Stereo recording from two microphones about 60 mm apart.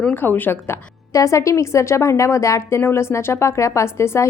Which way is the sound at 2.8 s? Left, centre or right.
Left.